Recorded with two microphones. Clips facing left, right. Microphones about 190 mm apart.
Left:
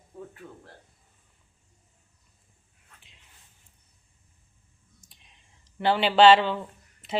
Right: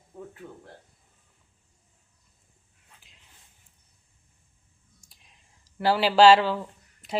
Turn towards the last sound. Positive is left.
turn(degrees=0)  # may be behind; listen again after turning